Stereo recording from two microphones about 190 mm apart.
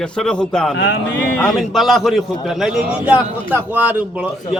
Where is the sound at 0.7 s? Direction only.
65° left (ahead or behind).